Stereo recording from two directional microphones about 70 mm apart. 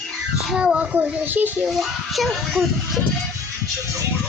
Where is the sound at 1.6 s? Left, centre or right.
Centre.